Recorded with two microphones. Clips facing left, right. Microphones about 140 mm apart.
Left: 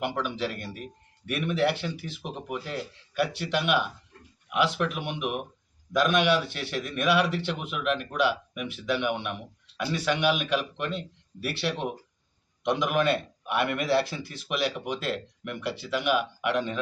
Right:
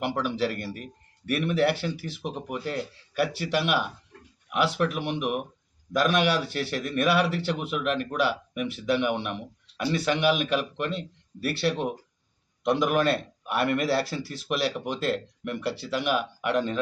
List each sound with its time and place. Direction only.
0.3 s speech: centre (ahead or behind)